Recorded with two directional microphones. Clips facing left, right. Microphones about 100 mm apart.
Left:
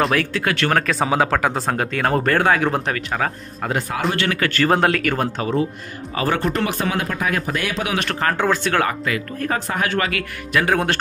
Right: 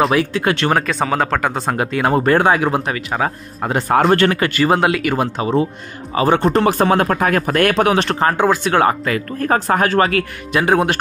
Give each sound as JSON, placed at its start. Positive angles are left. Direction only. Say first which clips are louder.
{"t": 0.1, "sound": "speech", "louder": "right 4 dB", "side_deg": -15}
{"t": 0.7, "sound": "speech", "louder": "right 1 dB", "side_deg": 0}
{"t": 1.8, "sound": "speech", "louder": "right 6 dB", "side_deg": -10}
{"t": 2.7, "sound": "speech", "louder": "right 3 dB", "side_deg": -10}
{"t": 3.3, "sound": "speech", "louder": "right 3 dB", "side_deg": -25}
{"t": 4.1, "sound": "speech", "louder": "right 8 dB", "side_deg": -45}
{"t": 4.4, "sound": "speech", "louder": "right 2 dB", "side_deg": -15}
{"t": 7.9, "sound": "speech", "louder": "right 5 dB", "side_deg": -25}
{"t": 8.8, "sound": "speech", "louder": "right 6 dB", "side_deg": -40}
{"t": 10.6, "sound": "speech", "louder": "right 4 dB", "side_deg": -20}